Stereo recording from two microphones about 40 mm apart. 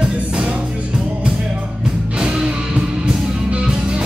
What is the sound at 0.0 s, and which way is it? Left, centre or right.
Music, right.